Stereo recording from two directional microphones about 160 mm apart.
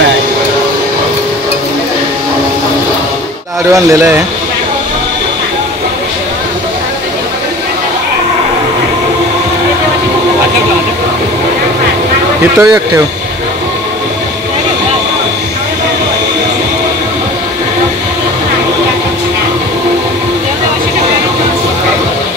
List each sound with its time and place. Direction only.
3.7 s speech: 20° right (ahead or behind)
12.5 s speech: 20° right (ahead or behind)